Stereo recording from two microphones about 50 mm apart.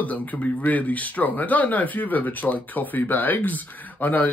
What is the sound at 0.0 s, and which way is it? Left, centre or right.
Speech, left.